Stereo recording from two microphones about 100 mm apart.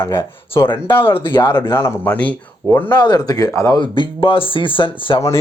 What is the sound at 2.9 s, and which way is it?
Speech, 45° left (ahead or behind).